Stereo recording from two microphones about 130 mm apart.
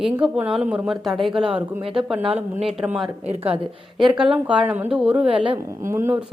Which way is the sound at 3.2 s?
55° right (ahead or behind).